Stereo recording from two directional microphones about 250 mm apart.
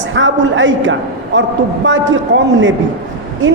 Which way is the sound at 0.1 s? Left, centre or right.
Right.